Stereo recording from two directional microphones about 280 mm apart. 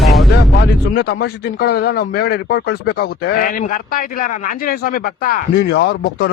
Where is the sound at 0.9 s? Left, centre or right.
Left.